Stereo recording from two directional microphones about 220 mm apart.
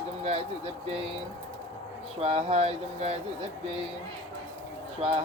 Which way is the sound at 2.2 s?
25° right (ahead or behind).